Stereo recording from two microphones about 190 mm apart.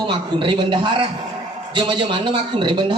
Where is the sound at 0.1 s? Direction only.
25° right (ahead or behind).